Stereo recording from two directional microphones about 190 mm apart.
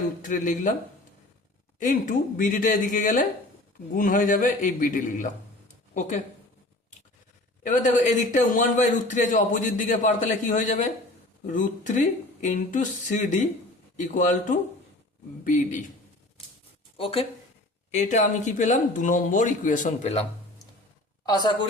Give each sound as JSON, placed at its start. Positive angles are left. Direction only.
{"t": 0.2, "sound": "speech", "side_deg": 45}
{"t": 1.8, "sound": "a man's voice", "side_deg": 45}
{"t": 7.6, "sound": "a man's voice", "side_deg": 40}
{"t": 17.0, "sound": "a man's voice", "side_deg": 30}
{"t": 21.2, "sound": "a woman's voice", "side_deg": 20}